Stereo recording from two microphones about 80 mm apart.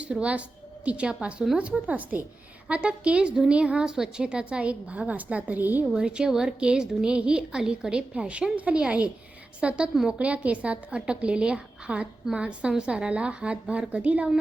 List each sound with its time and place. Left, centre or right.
0.0 s a woman's voice: centre
5.8 s a woman's voice: centre